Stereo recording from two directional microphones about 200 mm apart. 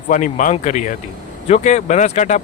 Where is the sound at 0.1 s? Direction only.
40° left (ahead or behind).